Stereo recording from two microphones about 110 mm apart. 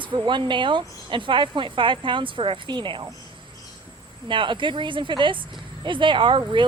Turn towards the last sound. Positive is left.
turn(degrees=-50)  # may be behind; listen again after turning